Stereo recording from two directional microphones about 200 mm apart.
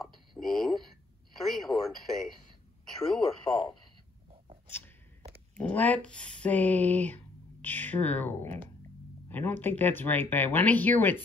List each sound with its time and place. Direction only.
0.0 s a sound: centre (ahead or behind)
1.4 s speech: centre (ahead or behind)
3.5 s speech: 20° left (ahead or behind)
5.6 s speech: 10° left (ahead or behind)